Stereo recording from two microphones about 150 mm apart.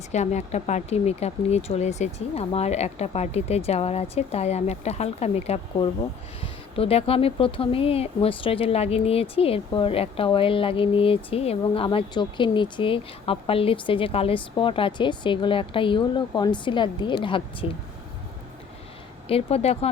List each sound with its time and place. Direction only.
0.1 s a woman's voice: 50° left (ahead or behind)
19.3 s speech: 40° left (ahead or behind)